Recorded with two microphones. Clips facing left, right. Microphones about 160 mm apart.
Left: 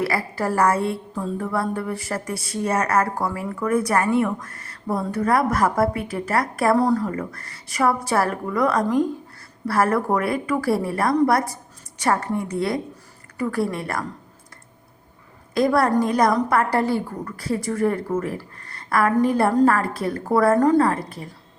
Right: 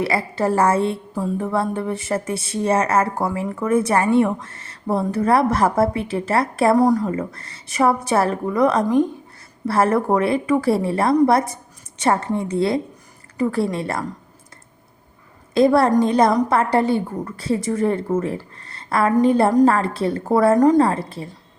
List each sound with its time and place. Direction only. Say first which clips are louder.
0.0 s a woman's voice: right 3 dB; 25° right (ahead or behind)
1.1 s music: right 3 dB; 10° right (ahead or behind)
1.5 s a woman's voice: right 3 dB; 20° right (ahead or behind)
6.7 s a woman's voice: right 3 dB; 15° right (ahead or behind)
15.5 s a woman's voice: right 4 dB; 25° right (ahead or behind)